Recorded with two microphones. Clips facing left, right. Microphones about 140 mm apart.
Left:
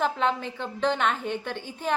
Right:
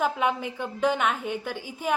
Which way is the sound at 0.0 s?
10° right (ahead or behind).